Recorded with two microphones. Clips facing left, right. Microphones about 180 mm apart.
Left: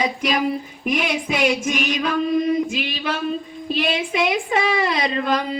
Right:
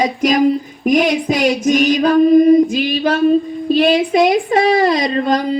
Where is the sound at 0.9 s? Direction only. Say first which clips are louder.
Right 8 dB; 45° right (ahead or behind).